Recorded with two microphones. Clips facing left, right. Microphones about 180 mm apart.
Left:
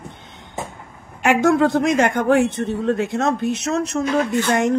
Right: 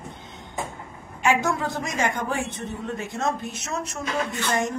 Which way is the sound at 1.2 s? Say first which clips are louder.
Left 8 dB; 65° left (ahead or behind).